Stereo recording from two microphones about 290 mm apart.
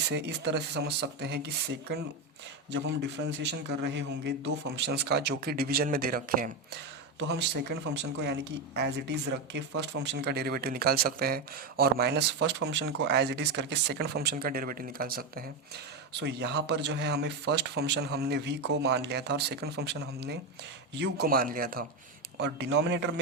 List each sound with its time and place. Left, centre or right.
0.0 s speech: right
2.6 s speech: right